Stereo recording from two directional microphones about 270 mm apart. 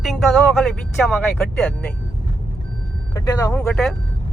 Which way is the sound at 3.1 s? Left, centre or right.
Centre.